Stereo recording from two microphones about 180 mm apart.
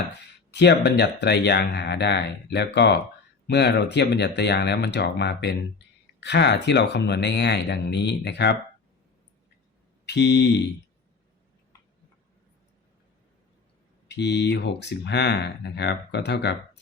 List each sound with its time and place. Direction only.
0.2 s speech: 70° left (ahead or behind)
10.1 s speech: 75° left (ahead or behind)
14.1 s speech: 70° left (ahead or behind)